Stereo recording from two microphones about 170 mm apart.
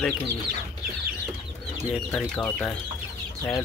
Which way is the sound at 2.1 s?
5° left (ahead or behind).